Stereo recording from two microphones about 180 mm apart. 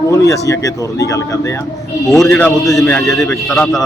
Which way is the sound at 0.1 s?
15° left (ahead or behind).